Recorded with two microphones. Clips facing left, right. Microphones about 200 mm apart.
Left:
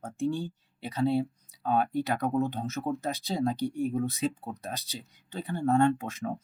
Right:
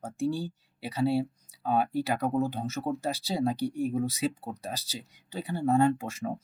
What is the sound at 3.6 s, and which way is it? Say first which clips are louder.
Speech: even; 35° right (ahead or behind).